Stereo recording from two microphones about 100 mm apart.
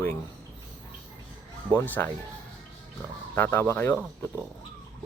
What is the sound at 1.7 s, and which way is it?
Speech, 20° left (ahead or behind).